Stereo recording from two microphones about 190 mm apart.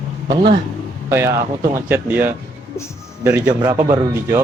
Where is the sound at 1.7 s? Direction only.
10° right (ahead or behind).